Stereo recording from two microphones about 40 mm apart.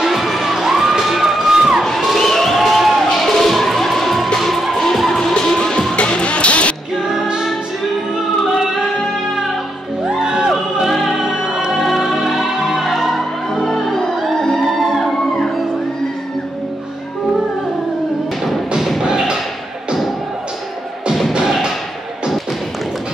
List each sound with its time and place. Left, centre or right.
0.0 s crowd: centre
2.1 s crowd: centre
3.3 s music: centre
5.6 s music: left
10.0 s music: centre
10.5 s music: centre
13.5 s music: centre
18.8 s music: centre
19.0 s thump: centre